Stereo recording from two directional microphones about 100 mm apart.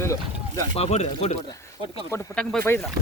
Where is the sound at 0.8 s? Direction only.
90° left.